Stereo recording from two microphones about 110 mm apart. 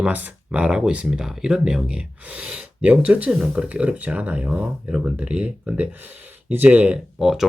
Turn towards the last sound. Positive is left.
turn(degrees=-5)  # may be behind; listen again after turning